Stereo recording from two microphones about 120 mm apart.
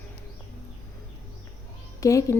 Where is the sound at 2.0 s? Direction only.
25° left (ahead or behind).